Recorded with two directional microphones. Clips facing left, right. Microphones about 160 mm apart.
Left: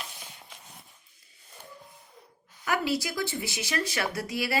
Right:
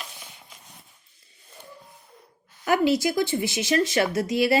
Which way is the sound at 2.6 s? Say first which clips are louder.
Right 8 dB; 25° right (ahead or behind).